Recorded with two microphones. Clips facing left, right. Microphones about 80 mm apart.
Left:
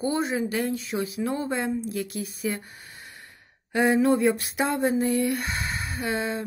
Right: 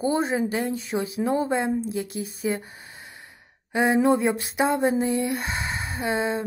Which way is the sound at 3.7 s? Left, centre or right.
Right.